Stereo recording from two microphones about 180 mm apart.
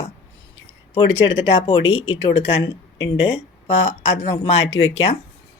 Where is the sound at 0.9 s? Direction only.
30° left (ahead or behind).